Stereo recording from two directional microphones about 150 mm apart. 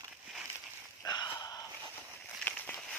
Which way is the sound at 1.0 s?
30° left (ahead or behind).